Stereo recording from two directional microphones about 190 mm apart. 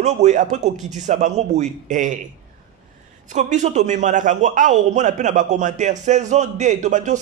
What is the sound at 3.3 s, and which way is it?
Speech, 40° right (ahead or behind).